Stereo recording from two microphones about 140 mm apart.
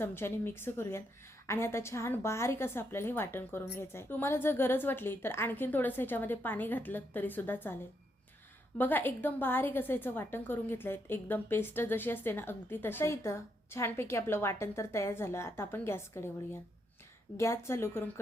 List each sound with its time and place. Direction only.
0.0 s a woman's voice: 15° left (ahead or behind)
8.8 s a woman's voice: 15° left (ahead or behind)
17.3 s a woman's voice: 20° left (ahead or behind)